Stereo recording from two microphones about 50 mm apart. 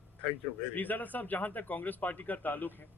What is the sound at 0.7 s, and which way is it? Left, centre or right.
Speech, left.